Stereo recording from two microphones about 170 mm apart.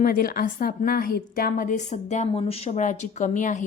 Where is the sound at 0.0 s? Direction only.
60° left (ahead or behind).